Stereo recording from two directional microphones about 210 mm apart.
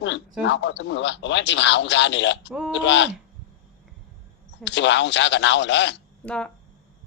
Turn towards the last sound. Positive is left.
turn(degrees=5)  # may be behind; listen again after turning